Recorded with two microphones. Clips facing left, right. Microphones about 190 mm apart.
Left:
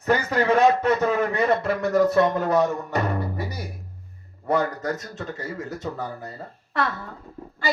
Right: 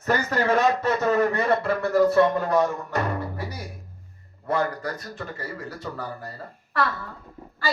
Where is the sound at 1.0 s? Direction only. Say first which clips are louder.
Right 2 dB; 10° left (ahead or behind).